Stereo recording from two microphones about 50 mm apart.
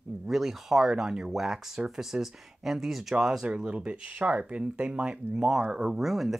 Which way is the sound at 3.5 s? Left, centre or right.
Right.